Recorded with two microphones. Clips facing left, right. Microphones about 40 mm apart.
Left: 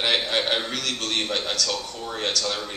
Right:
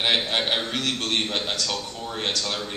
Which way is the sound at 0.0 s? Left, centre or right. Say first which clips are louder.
Even; centre.